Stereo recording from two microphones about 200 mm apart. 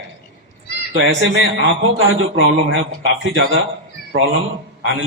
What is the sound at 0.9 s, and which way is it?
A man's voice, 75° right (ahead or behind).